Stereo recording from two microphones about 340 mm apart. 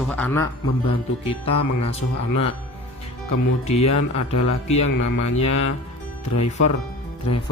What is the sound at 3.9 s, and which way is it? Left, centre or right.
Speech, left.